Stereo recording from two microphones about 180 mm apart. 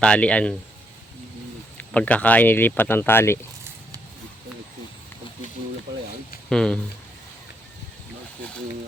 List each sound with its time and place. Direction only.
0.0 s speech: 5° left (ahead or behind)
1.8 s speech: 5° left (ahead or behind)
6.5 s speech: 5° left (ahead or behind)